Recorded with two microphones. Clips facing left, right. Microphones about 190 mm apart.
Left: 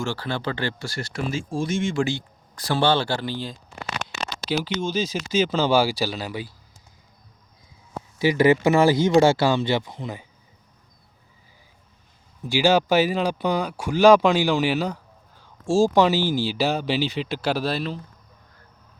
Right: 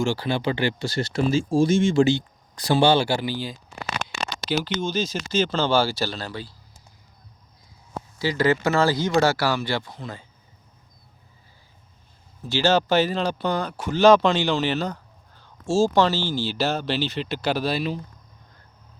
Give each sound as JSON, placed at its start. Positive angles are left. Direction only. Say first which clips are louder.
{"t": 0.0, "sound": "speech", "louder": "right 4 dB", "side_deg": -15}
{"t": 8.2, "sound": "speech", "louder": "left 4 dB", "side_deg": 20}
{"t": 12.5, "sound": "speech", "louder": "left 1 dB", "side_deg": 10}